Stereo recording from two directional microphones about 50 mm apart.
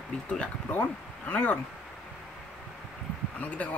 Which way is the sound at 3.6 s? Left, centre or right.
Left.